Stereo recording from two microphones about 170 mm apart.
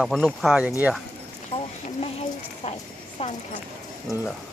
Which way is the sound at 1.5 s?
35° left (ahead or behind).